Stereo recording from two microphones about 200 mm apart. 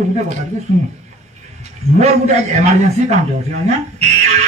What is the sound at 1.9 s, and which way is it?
A man's voice, 35° right (ahead or behind).